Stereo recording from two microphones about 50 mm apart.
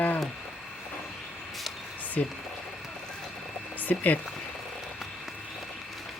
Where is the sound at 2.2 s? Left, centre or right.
Left.